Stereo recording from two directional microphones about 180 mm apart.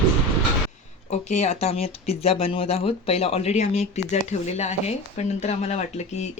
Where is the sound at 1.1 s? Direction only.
40° left (ahead or behind).